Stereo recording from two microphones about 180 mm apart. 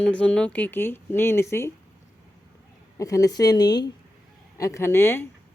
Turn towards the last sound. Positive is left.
turn(degrees=15)  # may be behind; listen again after turning